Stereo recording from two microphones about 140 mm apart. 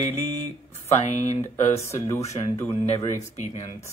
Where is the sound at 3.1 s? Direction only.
60° left (ahead or behind).